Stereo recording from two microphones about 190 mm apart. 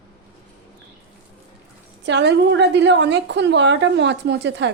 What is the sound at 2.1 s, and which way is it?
A woman's voice, 65° right (ahead or behind).